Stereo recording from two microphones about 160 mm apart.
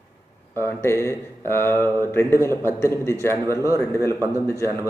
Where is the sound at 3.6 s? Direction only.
20° right (ahead or behind).